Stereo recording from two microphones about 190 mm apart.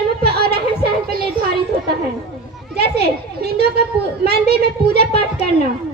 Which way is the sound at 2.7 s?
55° right (ahead or behind).